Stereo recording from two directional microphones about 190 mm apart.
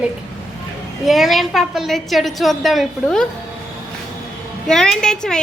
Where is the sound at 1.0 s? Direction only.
Centre (ahead or behind).